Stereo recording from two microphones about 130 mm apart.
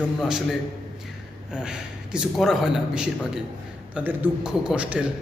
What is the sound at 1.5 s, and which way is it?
A man's voice, 5° right (ahead or behind).